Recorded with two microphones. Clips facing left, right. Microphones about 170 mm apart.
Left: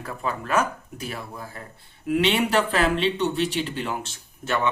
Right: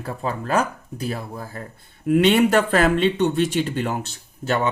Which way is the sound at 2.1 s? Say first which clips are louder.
Right 6 dB; 50° right (ahead or behind).